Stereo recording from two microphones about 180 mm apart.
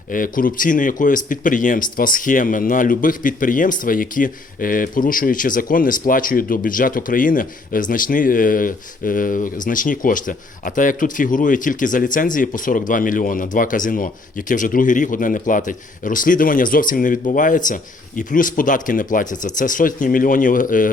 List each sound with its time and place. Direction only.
0.1 s speech: 50° left (ahead or behind)